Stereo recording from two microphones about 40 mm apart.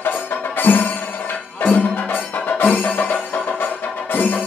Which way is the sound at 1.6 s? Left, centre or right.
Left.